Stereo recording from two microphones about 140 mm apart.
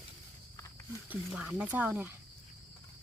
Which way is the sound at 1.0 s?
10° right (ahead or behind).